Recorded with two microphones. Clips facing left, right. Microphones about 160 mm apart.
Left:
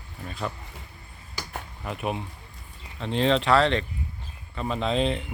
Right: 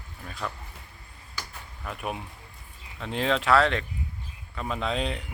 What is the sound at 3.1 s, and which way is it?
Speech, 5° right (ahead or behind).